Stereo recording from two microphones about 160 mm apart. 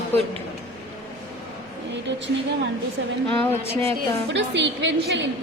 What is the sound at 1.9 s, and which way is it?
Speech, 90° right.